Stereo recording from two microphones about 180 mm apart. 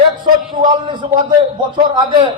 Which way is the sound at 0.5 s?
25° right (ahead or behind).